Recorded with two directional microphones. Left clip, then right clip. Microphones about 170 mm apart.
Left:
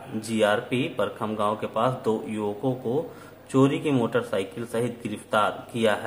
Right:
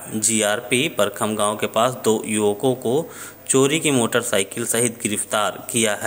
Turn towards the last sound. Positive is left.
turn(degrees=-30)  # may be behind; listen again after turning